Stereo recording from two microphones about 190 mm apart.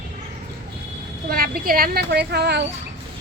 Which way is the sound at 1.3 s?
50° right (ahead or behind).